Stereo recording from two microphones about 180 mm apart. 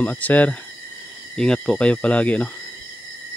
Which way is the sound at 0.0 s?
10° left (ahead or behind).